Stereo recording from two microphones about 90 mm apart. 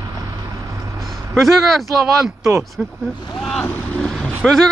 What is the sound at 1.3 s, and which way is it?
Speech, centre (ahead or behind).